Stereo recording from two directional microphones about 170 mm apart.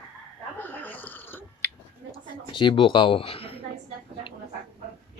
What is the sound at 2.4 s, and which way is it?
Speech, 30° left (ahead or behind).